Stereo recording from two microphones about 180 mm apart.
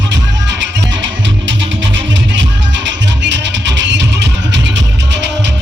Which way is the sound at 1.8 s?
90° right.